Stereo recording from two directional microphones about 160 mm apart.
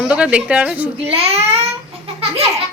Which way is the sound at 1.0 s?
40° right (ahead or behind).